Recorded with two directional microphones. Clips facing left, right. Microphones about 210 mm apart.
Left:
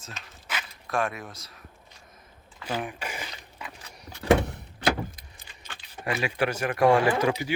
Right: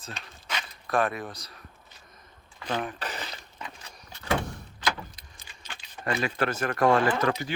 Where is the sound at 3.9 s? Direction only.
70° left (ahead or behind).